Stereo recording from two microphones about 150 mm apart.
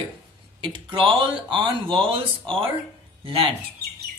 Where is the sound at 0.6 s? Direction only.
35° right (ahead or behind).